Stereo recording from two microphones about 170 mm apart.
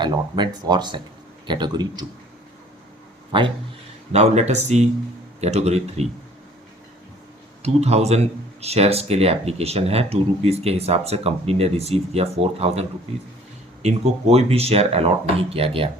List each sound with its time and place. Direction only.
0.0 s speech: 25° right (ahead or behind)
4.1 s speech: 40° right (ahead or behind)
7.6 s speech: 40° right (ahead or behind)
13.8 s speech: 40° right (ahead or behind)